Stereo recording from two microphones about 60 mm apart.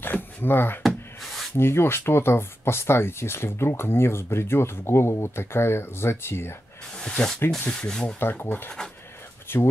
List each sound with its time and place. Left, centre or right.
0.0 s a sound: left
1.6 s speech: left
7.0 s speech: centre
8.2 s speech: left